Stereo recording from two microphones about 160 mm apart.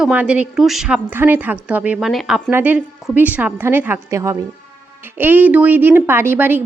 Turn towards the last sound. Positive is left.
turn(degrees=-10)  # may be behind; listen again after turning